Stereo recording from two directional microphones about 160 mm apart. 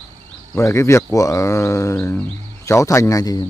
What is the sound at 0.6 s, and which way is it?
Speech, 15° left (ahead or behind).